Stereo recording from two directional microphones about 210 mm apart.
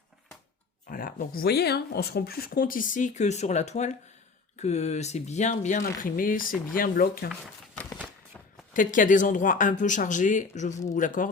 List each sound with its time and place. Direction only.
0.9 s speech: 45° left (ahead or behind)
7.9 s a sound: 5° left (ahead or behind)
8.7 s speech: 40° left (ahead or behind)